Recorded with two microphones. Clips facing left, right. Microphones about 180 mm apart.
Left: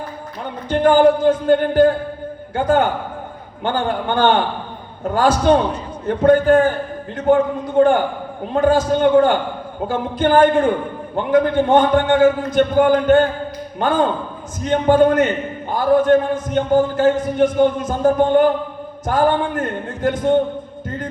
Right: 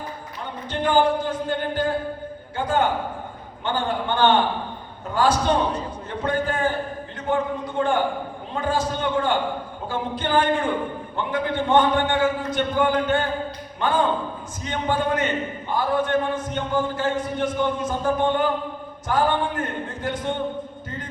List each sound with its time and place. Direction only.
0.7 s a man's voice: 45° left (ahead or behind)